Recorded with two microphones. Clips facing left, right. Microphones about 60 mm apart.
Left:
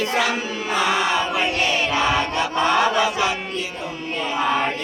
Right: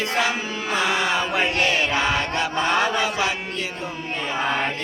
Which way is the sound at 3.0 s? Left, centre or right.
Right.